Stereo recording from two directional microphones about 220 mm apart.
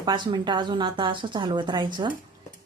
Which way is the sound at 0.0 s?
20° right (ahead or behind).